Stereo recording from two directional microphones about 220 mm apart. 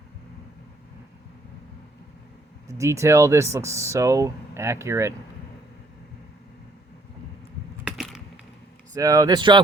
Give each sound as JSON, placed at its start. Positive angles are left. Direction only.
{"t": 2.6, "sound": "speech", "side_deg": -15}
{"t": 7.9, "sound": "computer keyboard", "side_deg": 0}
{"t": 9.0, "sound": "speech", "side_deg": -15}